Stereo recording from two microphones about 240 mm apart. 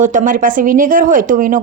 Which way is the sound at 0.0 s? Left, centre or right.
Right.